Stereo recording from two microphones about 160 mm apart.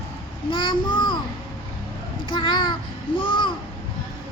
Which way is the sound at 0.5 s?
30° left (ahead or behind).